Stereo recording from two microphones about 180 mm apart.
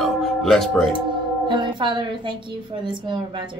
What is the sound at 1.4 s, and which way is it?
A woman's voice, 25° right (ahead or behind).